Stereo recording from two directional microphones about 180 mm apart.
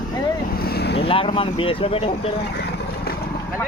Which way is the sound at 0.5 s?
60° left (ahead or behind).